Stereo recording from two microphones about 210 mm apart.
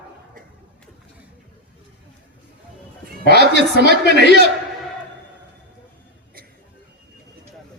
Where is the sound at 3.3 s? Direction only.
55° left (ahead or behind).